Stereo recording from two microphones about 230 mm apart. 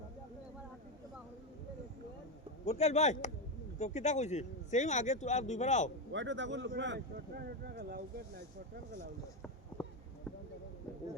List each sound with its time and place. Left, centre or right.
2.6 s speech: left
6.1 s speech: right